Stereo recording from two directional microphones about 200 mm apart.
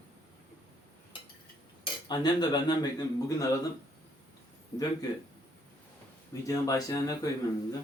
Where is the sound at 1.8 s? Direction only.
20° left (ahead or behind).